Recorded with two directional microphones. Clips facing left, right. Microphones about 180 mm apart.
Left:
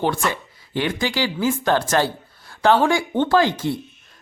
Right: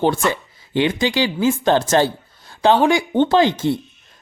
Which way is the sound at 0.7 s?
20° right (ahead or behind).